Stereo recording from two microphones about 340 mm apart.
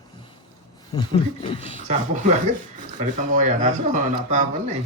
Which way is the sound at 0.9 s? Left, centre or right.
Centre.